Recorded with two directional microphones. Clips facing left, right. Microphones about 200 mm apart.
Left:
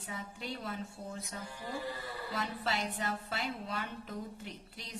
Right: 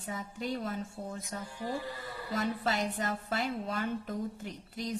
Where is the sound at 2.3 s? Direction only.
45° right (ahead or behind).